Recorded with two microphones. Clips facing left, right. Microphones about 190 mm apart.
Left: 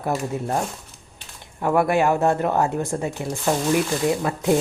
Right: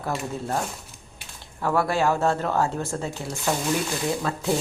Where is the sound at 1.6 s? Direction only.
20° left (ahead or behind).